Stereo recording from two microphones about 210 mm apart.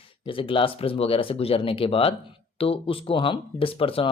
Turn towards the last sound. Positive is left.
turn(degrees=25)  # may be behind; listen again after turning